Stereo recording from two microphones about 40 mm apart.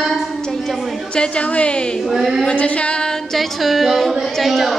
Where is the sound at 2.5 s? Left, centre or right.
Left.